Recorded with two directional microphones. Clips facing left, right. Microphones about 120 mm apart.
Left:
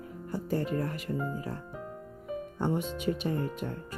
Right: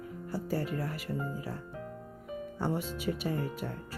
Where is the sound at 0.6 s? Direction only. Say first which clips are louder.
Left 3 dB; 25° left (ahead or behind).